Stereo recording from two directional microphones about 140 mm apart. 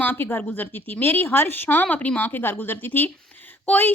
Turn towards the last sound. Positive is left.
turn(degrees=15)  # may be behind; listen again after turning